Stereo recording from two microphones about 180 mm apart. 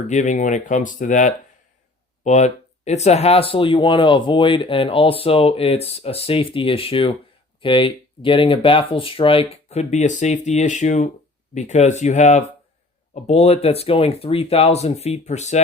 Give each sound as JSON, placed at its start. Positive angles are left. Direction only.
{"t": 0.1, "sound": "speech", "side_deg": 40}